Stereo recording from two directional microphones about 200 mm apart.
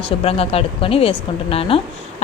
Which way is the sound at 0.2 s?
30° left (ahead or behind).